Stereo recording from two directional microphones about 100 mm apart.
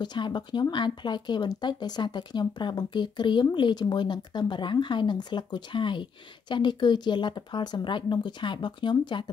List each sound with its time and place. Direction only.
0.0 s speech: 50° left (ahead or behind)